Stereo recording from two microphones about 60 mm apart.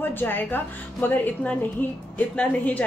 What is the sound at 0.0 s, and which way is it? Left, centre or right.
A woman's voice, left.